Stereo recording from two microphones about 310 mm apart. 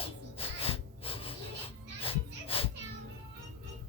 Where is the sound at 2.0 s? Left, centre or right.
Centre.